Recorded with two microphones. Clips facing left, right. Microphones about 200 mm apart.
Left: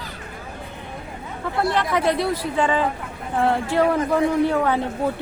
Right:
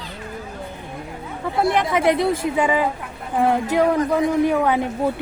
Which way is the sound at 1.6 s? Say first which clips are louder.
Right 3 dB; 20° right (ahead or behind).